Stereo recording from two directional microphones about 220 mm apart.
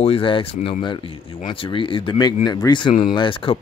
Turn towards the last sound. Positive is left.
turn(degrees=25)  # may be behind; listen again after turning